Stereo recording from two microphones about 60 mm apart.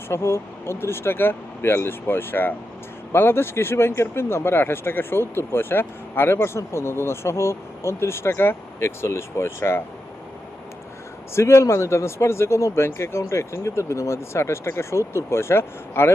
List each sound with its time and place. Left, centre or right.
0.1 s speech: left
11.3 s speech: left